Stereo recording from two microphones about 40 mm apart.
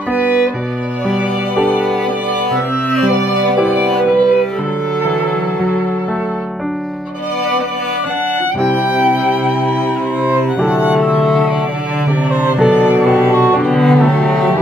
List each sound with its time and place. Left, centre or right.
0.2 s music: right
2.5 s music: centre
4.0 s music: left
11.0 s music: centre
13.5 s cello: left
13.7 s cello: centre